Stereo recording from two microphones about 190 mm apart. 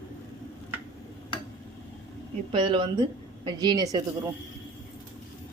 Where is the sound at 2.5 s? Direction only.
25° right (ahead or behind).